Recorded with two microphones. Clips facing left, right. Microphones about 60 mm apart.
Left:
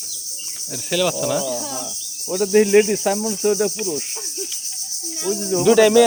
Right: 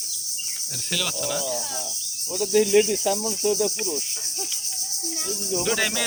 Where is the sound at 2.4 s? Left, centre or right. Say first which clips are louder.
Left 5 dB; left.